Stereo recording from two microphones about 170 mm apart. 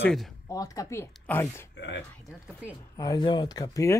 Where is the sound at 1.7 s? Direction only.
90° left.